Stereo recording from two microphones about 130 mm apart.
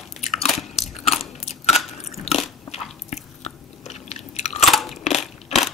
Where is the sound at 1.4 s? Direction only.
55° left (ahead or behind).